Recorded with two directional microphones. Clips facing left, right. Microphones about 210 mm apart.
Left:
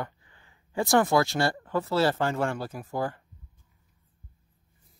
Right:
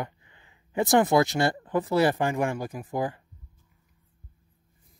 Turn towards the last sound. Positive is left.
turn(degrees=-15)  # may be behind; listen again after turning